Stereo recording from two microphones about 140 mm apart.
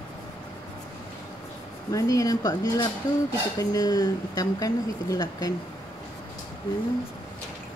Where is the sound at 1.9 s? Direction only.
25° left (ahead or behind).